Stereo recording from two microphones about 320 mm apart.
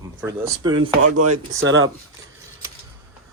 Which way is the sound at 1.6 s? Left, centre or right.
Right.